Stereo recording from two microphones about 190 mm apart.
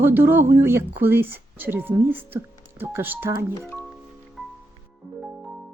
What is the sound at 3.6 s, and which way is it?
Music, 10° left (ahead or behind).